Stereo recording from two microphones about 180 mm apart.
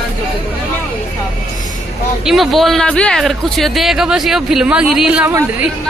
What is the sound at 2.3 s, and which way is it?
Speech, centre (ahead or behind).